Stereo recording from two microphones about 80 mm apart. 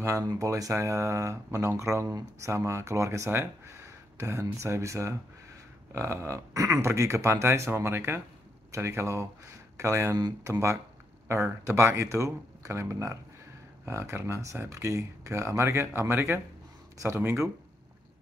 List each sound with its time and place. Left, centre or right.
0.3 s speech: right